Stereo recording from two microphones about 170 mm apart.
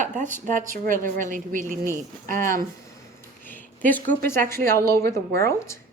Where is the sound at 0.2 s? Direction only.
50° right (ahead or behind).